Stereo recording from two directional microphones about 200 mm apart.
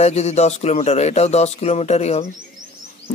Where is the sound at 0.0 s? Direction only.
35° left (ahead or behind).